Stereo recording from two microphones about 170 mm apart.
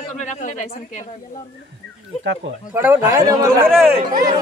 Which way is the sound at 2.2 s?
90° right.